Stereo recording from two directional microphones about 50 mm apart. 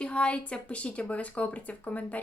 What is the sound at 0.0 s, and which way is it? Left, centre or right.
Speech, left.